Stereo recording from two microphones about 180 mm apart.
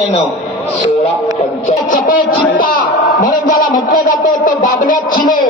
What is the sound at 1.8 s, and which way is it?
A man's voice, 50° left (ahead or behind).